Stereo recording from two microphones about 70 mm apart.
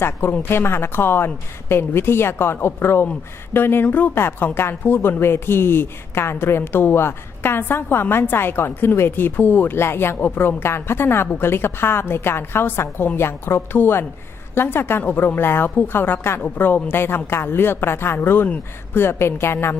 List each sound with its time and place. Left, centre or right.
0.0 s a woman's voice: left